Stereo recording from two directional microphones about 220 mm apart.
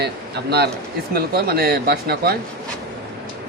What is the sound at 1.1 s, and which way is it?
Speech, 45° right (ahead or behind).